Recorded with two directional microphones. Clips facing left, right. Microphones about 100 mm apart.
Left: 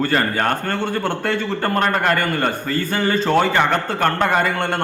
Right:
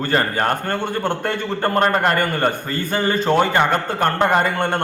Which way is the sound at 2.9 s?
20° right (ahead or behind).